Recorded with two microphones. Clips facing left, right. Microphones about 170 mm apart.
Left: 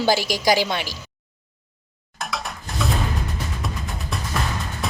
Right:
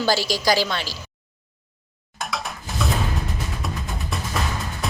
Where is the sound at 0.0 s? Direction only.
20° left (ahead or behind).